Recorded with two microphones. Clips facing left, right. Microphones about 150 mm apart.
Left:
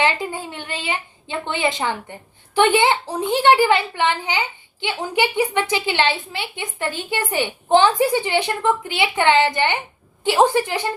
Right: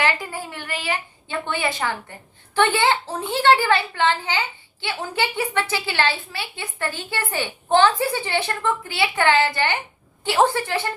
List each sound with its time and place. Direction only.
0.0 s a woman's voice: 20° left (ahead or behind)